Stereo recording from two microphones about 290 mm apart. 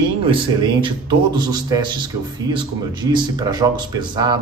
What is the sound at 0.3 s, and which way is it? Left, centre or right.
A man's voice, centre.